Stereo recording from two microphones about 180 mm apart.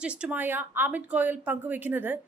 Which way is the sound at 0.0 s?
5° right (ahead or behind).